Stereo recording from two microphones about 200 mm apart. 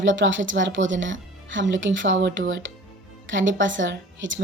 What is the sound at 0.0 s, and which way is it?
A woman's voice, 70° right (ahead or behind).